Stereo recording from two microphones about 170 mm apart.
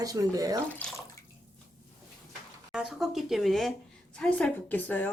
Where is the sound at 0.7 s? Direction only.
5° left (ahead or behind).